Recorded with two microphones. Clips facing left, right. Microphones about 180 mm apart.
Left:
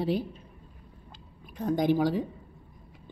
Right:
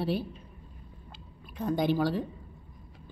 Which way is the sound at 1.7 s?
15° left (ahead or behind).